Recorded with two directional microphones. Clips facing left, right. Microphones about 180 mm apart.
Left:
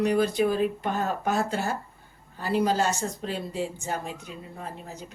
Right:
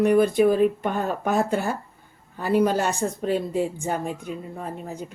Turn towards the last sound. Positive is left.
turn(degrees=-50)  # may be behind; listen again after turning